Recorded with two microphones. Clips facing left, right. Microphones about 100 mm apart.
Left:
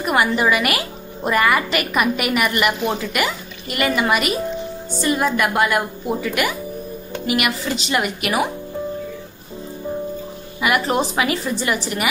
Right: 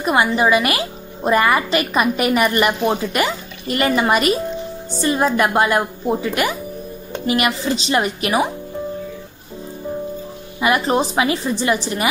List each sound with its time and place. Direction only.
0.0 s a woman's voice: 25° right (ahead or behind)
10.6 s a woman's voice: 25° right (ahead or behind)